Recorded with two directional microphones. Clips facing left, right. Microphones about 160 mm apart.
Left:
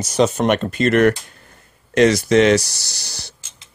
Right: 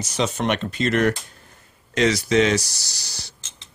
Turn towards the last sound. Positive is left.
turn(degrees=60)  # may be behind; listen again after turning